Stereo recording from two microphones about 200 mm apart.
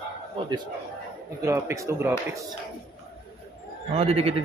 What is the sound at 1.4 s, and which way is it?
Speech, 15° right (ahead or behind).